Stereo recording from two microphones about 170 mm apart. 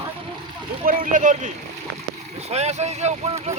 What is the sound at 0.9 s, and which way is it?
Speech, 50° right (ahead or behind).